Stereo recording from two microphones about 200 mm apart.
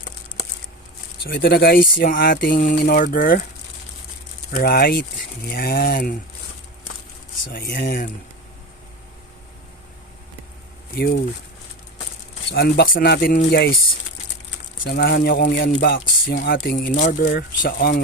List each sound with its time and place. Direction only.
1.2 s speech: 50° left (ahead or behind)
4.5 s speech: 50° left (ahead or behind)
7.5 s speech: 45° left (ahead or behind)
10.9 s speech: 50° left (ahead or behind)
12.5 s speech: 50° left (ahead or behind)
14.8 s speech: 50° left (ahead or behind)